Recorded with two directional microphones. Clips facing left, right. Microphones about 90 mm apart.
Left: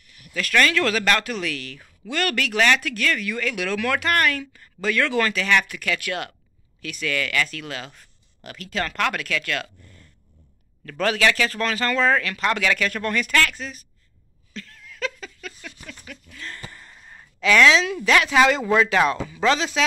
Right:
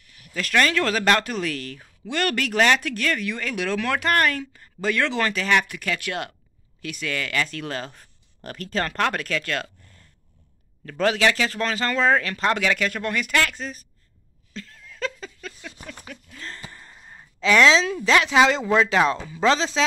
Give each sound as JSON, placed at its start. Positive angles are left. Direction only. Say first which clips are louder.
{"t": 0.3, "sound": "speech", "louder": "left 1 dB", "side_deg": -25}
{"t": 7.6, "sound": "speech", "louder": "right 3 dB", "side_deg": -40}
{"t": 10.9, "sound": "speech", "louder": "right 1 dB", "side_deg": -25}
{"t": 14.5, "sound": "a sound", "louder": "even", "side_deg": -25}
{"t": 16.9, "sound": "sigh", "louder": "even", "side_deg": -10}
{"t": 17.4, "sound": "speech", "louder": "even", "side_deg": -25}